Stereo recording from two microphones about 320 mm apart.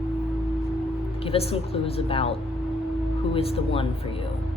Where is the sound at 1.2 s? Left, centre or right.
Centre.